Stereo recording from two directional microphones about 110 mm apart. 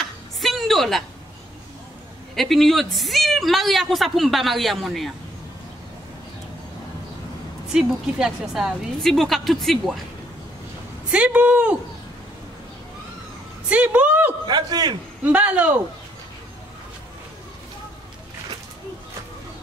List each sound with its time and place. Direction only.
0.0 s a sound: centre (ahead or behind)
2.3 s a man's voice: centre (ahead or behind)
7.7 s a man's voice: 5° right (ahead or behind)
11.1 s speech: 10° right (ahead or behind)
13.7 s a sound: 15° right (ahead or behind)
14.4 s a man's voice: 40° right (ahead or behind)
15.2 s speech: 15° right (ahead or behind)